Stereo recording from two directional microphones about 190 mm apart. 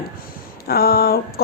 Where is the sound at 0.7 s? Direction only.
55° left (ahead or behind).